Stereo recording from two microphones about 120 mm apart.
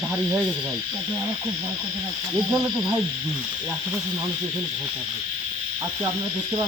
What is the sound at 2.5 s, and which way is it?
Snake, 30° right (ahead or behind).